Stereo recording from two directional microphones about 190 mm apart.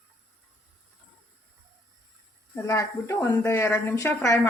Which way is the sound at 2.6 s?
15° left (ahead or behind).